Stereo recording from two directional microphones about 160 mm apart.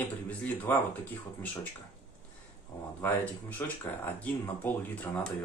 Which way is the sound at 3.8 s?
10° left (ahead or behind).